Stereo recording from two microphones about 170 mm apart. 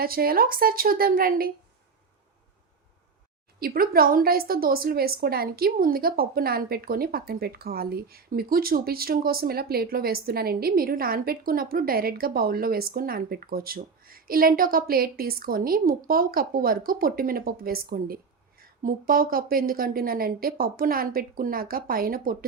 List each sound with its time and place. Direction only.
0.0 s a woman's voice: 60° right (ahead or behind)
3.6 s a woman's voice: 60° right (ahead or behind)